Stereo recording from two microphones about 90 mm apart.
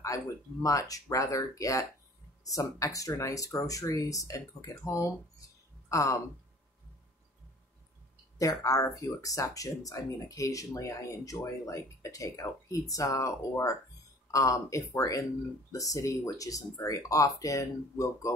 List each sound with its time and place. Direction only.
0.0 s speech: 40° left (ahead or behind)
8.4 s speech: 40° left (ahead or behind)